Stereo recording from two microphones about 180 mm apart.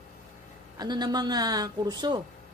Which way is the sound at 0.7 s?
25° right (ahead or behind).